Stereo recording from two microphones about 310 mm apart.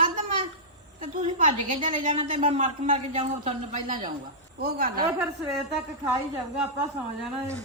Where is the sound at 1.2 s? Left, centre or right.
Right.